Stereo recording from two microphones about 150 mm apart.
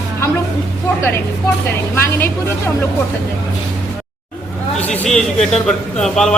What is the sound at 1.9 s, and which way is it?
Speech, 15° left (ahead or behind).